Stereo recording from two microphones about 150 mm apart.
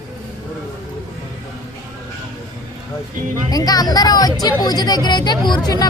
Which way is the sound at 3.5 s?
25° left (ahead or behind).